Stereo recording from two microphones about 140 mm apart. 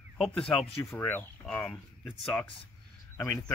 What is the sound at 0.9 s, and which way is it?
Speech, 15° left (ahead or behind).